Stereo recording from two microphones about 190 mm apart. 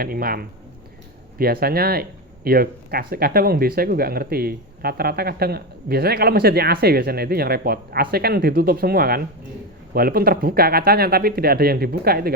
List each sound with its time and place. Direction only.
0.0 s speech: 50° right (ahead or behind)